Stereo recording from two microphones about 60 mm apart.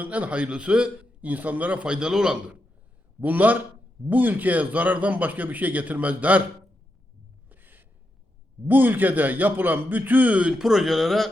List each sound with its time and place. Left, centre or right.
0.0 s a man's voice: right
3.2 s a man's voice: right
7.5 s gasp: right
8.6 s a man's voice: right
10.6 s speech: centre